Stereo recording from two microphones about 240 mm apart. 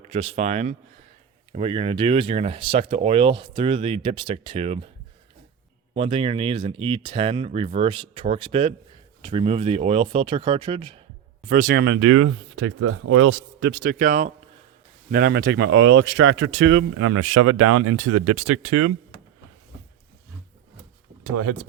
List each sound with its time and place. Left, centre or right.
0.0 s speech: right
5.9 s speech: right
11.4 s speech: right
21.2 s speech: right